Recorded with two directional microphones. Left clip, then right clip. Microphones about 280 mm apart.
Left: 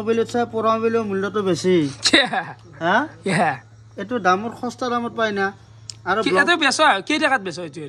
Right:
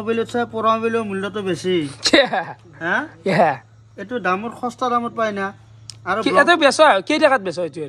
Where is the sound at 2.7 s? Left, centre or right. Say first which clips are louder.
Left 3 dB; centre.